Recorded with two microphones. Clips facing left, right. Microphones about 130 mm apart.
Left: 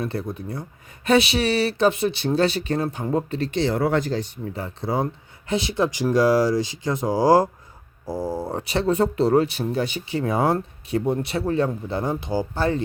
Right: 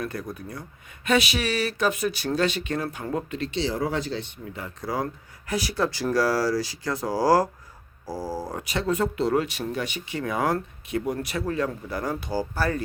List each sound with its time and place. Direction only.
0.0 s speech: 25° left (ahead or behind)
3.5 s speech: 55° left (ahead or behind); by 12.8 s 20° left (ahead or behind)